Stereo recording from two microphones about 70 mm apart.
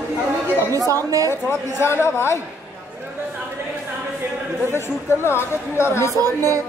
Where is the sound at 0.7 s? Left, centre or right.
Right.